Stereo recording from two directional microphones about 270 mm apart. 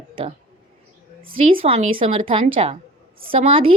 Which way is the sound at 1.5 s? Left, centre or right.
Right.